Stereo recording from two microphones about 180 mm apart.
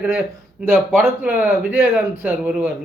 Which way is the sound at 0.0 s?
5° right (ahead or behind).